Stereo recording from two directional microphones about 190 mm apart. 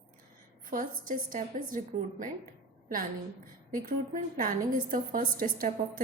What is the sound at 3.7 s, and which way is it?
A woman's voice, 45° right (ahead or behind).